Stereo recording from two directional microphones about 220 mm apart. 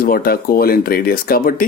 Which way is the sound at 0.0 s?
40° left (ahead or behind).